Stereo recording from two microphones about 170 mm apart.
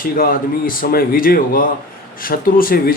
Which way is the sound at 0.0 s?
55° left (ahead or behind).